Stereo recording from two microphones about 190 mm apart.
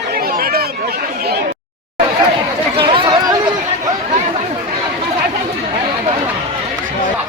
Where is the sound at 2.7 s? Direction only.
25° right (ahead or behind).